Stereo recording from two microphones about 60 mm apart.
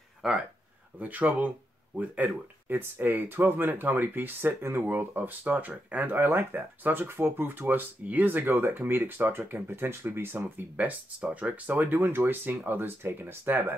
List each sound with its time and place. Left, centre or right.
0.2 s speech: centre
0.9 s speech: right